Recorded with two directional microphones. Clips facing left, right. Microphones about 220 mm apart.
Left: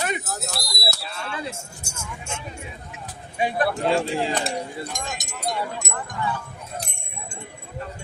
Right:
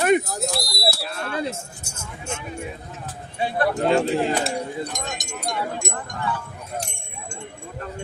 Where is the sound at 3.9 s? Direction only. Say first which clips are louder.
Right 3 dB; 15° right (ahead or behind).